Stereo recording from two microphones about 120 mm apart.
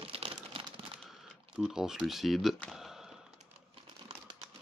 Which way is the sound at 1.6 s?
5° right (ahead or behind).